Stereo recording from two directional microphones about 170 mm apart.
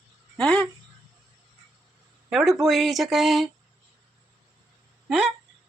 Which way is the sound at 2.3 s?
Centre (ahead or behind).